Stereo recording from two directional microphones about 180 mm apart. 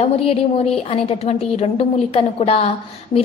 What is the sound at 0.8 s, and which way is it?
A woman's voice, 35° left (ahead or behind).